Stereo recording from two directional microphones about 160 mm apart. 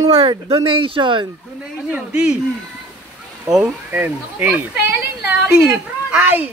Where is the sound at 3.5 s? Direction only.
10° right (ahead or behind).